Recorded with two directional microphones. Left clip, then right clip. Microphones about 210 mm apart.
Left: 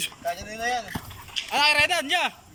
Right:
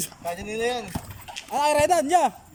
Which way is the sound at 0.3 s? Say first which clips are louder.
Right 2 dB; 60° right (ahead or behind).